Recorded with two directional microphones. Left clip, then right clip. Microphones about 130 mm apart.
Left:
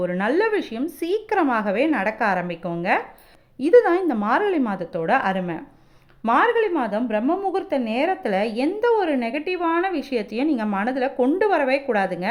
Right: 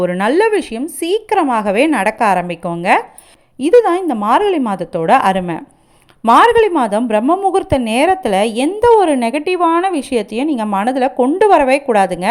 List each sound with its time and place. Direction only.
0.0 s a woman's voice: 35° right (ahead or behind)